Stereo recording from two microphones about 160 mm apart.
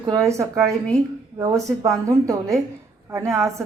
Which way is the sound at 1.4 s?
20° right (ahead or behind).